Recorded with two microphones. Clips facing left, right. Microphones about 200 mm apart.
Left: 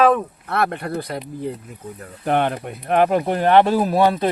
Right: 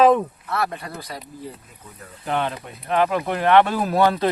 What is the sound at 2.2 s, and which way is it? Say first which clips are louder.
Speech: left 5 dB; 55° left (ahead or behind).